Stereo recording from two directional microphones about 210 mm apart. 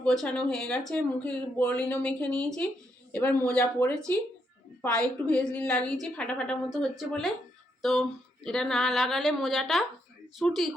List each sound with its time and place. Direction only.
0.0 s speech: 5° left (ahead or behind)